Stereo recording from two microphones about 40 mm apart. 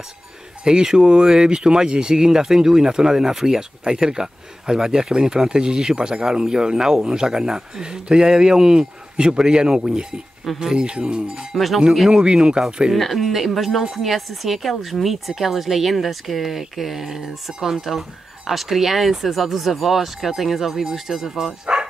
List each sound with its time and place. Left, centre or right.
0.7 s speech: centre
11.5 s a woman's voice: centre
12.1 s speech: right
12.9 s a woman's voice: centre